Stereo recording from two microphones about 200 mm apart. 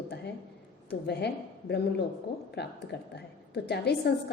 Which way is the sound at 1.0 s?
55° left (ahead or behind).